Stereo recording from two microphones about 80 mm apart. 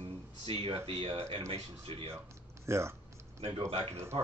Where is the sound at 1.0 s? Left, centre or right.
Right.